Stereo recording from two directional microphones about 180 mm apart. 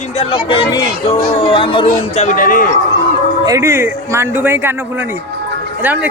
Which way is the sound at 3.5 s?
15° right (ahead or behind).